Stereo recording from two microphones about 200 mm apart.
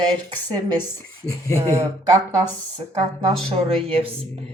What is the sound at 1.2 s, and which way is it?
Speech, 15° left (ahead or behind).